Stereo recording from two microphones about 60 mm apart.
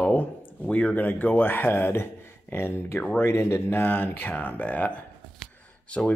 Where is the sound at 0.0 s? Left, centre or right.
Left.